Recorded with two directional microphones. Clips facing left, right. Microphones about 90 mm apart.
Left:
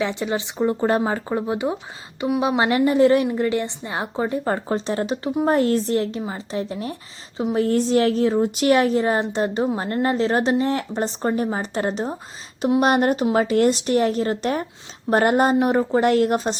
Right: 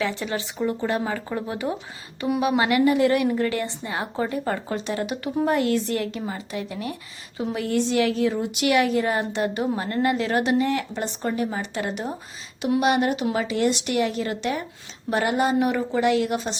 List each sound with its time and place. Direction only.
0.0 s a woman's voice: 20° left (ahead or behind)
0.6 s a woman's voice: 35° left (ahead or behind)
3.2 s a woman's voice: 20° left (ahead or behind)
4.5 s speech: 35° left (ahead or behind)